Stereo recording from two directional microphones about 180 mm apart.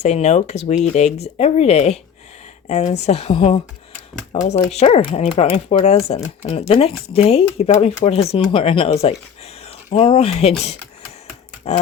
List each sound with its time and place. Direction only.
0.0 s speech: 40° left (ahead or behind)